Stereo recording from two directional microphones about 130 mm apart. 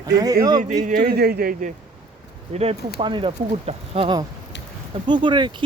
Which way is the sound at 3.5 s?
55° right (ahead or behind).